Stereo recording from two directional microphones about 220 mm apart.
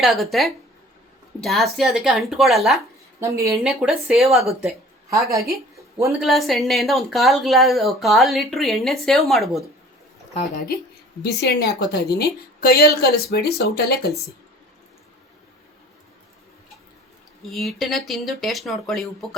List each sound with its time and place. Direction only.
0.0 s speech: centre (ahead or behind)
3.2 s a woman's voice: 15° right (ahead or behind)
3.5 s speech: centre (ahead or behind)
6.1 s speech: centre (ahead or behind)
11.2 s a woman's voice: 45° left (ahead or behind)
17.4 s speech: centre (ahead or behind)